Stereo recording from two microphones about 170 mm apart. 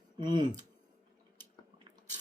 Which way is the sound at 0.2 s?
25° right (ahead or behind).